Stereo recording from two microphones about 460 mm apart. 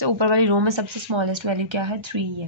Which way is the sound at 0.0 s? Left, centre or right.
Right.